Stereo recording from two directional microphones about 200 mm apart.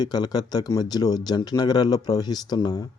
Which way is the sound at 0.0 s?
20° left (ahead or behind).